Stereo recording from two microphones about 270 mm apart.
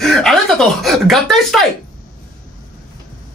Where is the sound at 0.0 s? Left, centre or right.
Centre.